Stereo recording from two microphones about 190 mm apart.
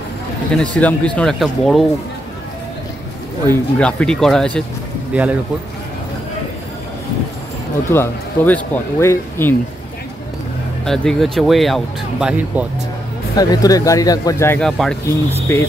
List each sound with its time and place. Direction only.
0.6 s speech: 5° left (ahead or behind)
3.4 s speech: 5° left (ahead or behind)
7.9 s speech: 10° left (ahead or behind)
10.9 s speech: centre (ahead or behind)
13.4 s speech: 20° left (ahead or behind)
14.6 s speech: 5° left (ahead or behind)